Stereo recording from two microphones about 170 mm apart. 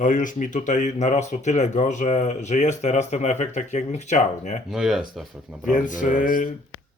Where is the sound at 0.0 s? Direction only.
50° left (ahead or behind).